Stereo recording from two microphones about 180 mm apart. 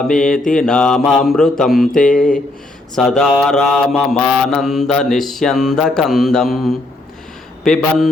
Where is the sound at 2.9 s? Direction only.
5° left (ahead or behind).